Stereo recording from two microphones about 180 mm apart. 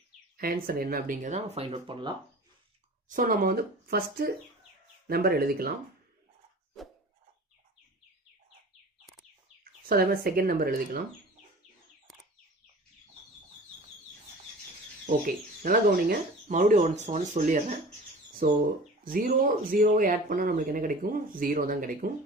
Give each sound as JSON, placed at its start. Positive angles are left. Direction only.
{"t": 0.3, "sound": "speech", "side_deg": -55}
{"t": 3.1, "sound": "speech", "side_deg": -50}
{"t": 9.9, "sound": "speech", "side_deg": -55}
{"t": 12.1, "sound": "bird", "side_deg": 0}
{"t": 15.0, "sound": "speech", "side_deg": -50}
{"t": 18.4, "sound": "speech", "side_deg": -55}